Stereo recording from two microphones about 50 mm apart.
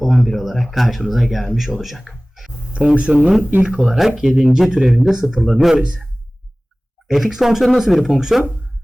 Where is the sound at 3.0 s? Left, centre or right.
Right.